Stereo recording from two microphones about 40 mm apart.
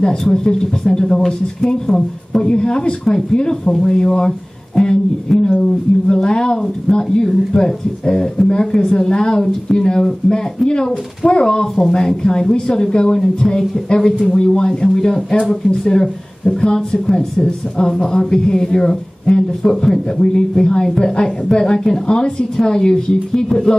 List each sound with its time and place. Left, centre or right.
0.0 s speech: centre
22.0 s speech: left
22.6 s speech: centre